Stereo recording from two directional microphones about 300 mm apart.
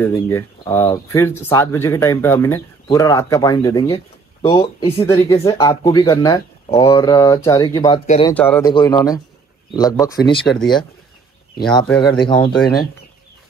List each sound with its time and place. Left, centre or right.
0.0 s speech: centre
10.4 s speech: centre
12.1 s speech: centre